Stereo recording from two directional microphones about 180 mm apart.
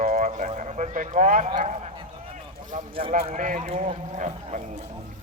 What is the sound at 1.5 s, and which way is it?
Speech, 40° right (ahead or behind).